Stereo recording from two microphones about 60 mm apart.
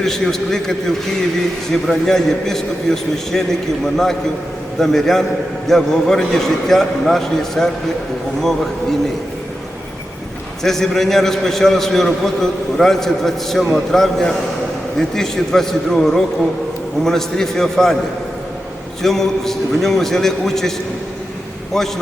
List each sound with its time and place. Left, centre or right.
0.0 s a man's voice: centre
10.6 s a man's voice: centre
19.0 s a man's voice: centre